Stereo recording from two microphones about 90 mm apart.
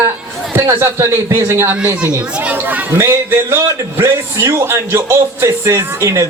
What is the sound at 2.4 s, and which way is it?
A man's voice, 15° right (ahead or behind).